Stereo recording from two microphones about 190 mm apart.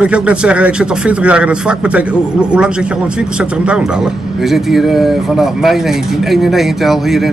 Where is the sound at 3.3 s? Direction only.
5° right (ahead or behind).